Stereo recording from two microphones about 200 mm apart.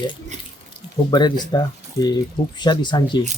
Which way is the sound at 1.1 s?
20° left (ahead or behind).